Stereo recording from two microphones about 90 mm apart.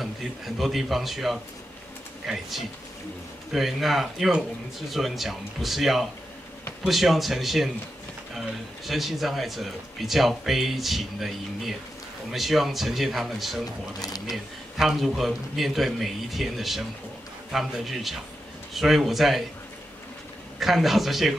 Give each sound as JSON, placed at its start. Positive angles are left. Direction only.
{"t": 0.6, "sound": "speech", "side_deg": 0}
{"t": 14.0, "sound": "speech", "side_deg": 45}
{"t": 14.3, "sound": "speech", "side_deg": 0}
{"t": 20.5, "sound": "speech", "side_deg": 0}